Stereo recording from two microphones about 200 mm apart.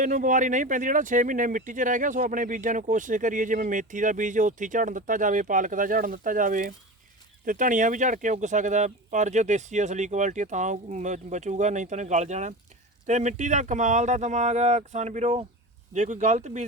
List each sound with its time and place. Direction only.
0.0 s speech: 40° right (ahead or behind)